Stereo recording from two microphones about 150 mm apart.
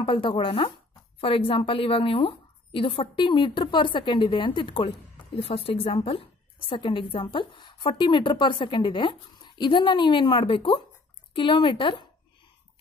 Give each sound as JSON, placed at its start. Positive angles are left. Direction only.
{"t": 0.0, "sound": "a woman's voice", "side_deg": 35}